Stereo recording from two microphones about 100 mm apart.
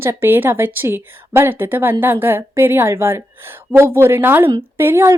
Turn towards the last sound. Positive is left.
turn(degrees=-25)  # may be behind; listen again after turning